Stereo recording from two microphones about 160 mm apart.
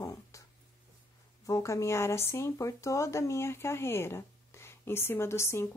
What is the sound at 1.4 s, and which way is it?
Speech, 20° left (ahead or behind).